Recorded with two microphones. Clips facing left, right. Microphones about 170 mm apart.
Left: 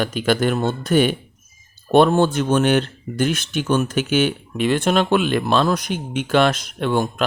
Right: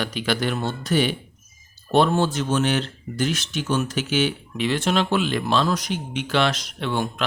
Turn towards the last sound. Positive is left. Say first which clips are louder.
# left 5 dB
turn(degrees=45)  # may be behind; listen again after turning